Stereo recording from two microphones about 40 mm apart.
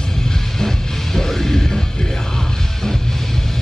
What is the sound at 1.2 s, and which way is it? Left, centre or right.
Music, centre.